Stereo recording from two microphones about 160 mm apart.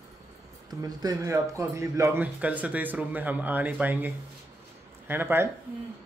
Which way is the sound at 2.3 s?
10° right (ahead or behind).